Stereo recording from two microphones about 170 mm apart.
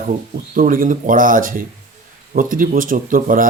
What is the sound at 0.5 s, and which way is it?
Speech, 55° right (ahead or behind).